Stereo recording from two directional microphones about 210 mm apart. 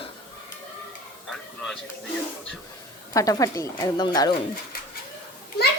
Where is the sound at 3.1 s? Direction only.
15° left (ahead or behind).